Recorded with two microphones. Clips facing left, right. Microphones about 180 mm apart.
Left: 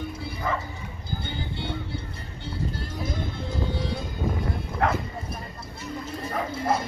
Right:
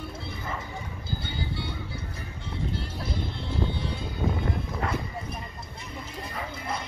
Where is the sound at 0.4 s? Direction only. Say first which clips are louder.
Left 8 dB; 90° left.